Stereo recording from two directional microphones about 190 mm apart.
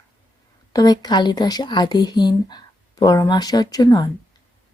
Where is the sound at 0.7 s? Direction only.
20° left (ahead or behind).